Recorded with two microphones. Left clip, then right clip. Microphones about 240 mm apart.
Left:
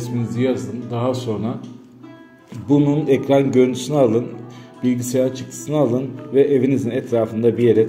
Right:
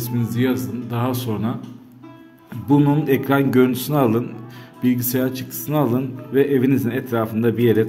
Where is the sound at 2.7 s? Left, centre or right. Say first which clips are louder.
Left 1 dB; right.